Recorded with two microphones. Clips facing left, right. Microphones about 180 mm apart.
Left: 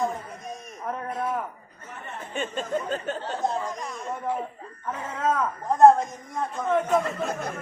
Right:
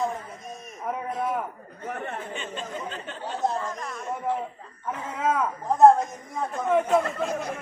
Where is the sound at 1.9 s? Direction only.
55° right (ahead or behind).